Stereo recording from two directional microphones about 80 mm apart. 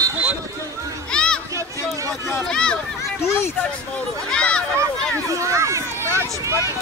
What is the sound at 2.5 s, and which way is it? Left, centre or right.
Speech, centre.